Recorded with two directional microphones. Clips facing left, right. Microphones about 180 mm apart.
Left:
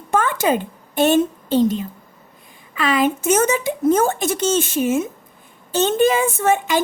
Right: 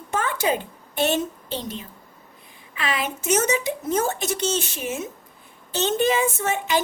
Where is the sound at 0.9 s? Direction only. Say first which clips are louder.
Left 7 dB; 50° left (ahead or behind).